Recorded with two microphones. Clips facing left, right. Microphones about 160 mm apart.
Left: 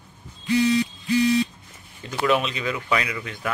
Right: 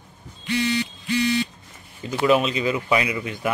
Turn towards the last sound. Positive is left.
turn(degrees=-15)  # may be behind; listen again after turning